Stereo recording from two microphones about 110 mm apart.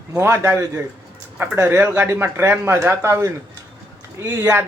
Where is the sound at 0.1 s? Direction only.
20° right (ahead or behind).